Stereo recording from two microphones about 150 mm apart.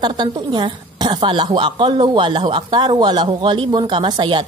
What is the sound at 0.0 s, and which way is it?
A woman's voice, 30° right (ahead or behind).